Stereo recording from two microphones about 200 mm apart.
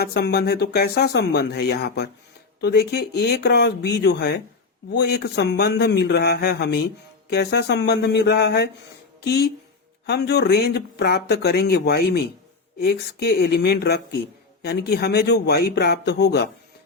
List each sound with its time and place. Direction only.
0.0 s speech: 50° left (ahead or behind)